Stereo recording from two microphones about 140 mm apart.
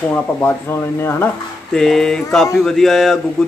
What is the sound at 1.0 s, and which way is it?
Speech, 15° left (ahead or behind).